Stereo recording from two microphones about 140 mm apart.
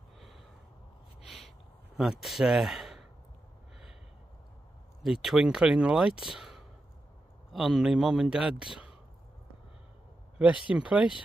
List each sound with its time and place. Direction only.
1.2 s a sound: centre (ahead or behind)
2.0 s speech: centre (ahead or behind)
5.0 s speech: centre (ahead or behind)
10.7 s speech: 10° right (ahead or behind)